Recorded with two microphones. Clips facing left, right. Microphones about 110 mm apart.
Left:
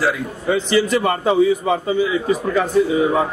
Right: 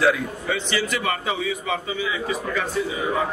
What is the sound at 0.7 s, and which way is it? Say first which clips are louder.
A man's voice: left 9 dB; 30° left (ahead or behind).